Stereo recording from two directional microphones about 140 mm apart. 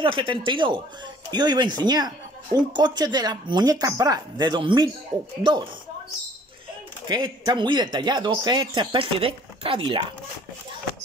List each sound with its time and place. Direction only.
0.0 s speech: 35° right (ahead or behind)
7.1 s speech: 30° right (ahead or behind)